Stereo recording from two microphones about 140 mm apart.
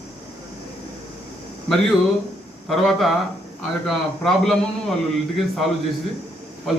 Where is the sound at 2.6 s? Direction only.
Centre (ahead or behind).